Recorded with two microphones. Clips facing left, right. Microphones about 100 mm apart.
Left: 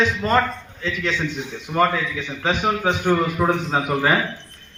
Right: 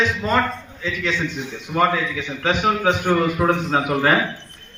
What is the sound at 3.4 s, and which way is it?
Speech, 10° left (ahead or behind).